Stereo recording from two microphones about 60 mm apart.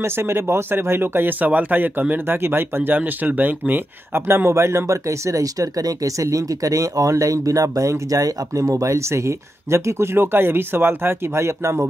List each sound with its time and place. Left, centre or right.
0.0 s speech: right
1.4 s speech: right
3.0 s speech: right